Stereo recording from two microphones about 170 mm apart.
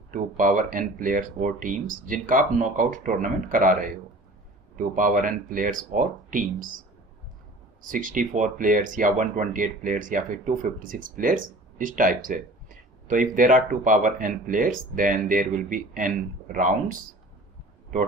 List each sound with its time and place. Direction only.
0.1 s speech: 55° right (ahead or behind)
7.8 s speech: 50° right (ahead or behind)